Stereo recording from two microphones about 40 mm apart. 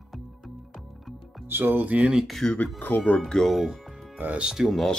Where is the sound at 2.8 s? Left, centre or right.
Left.